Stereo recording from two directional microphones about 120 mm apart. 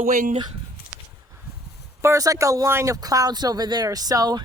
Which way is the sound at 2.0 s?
25° right (ahead or behind).